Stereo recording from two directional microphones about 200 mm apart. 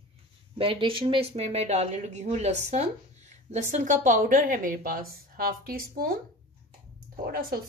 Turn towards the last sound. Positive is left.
turn(degrees=-45)  # may be behind; listen again after turning